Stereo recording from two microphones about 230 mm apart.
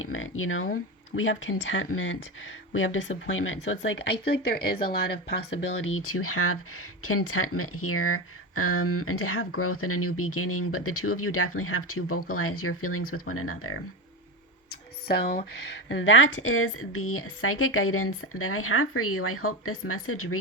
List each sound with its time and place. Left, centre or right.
0.0 s speech: left
5.9 s speech: left
14.7 s a sound: left
15.9 s speech: left